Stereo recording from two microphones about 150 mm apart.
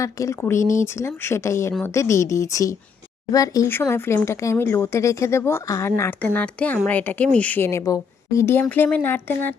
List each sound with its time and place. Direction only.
0.0 s speech: 20° left (ahead or behind)